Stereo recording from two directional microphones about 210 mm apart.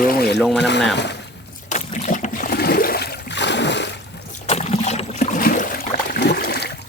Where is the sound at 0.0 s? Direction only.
45° left (ahead or behind).